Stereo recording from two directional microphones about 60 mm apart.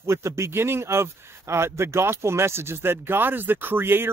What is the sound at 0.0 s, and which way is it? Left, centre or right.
A man's voice, right.